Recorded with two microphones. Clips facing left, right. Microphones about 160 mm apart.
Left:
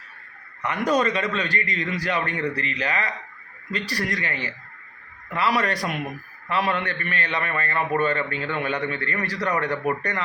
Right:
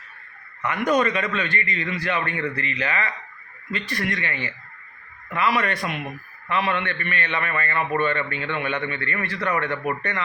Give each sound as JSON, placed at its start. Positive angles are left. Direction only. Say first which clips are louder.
{"t": 0.6, "sound": "a man's voice", "louder": "right 1 dB", "side_deg": 35}